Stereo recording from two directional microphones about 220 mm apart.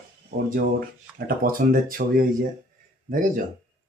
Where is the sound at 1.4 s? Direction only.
40° right (ahead or behind).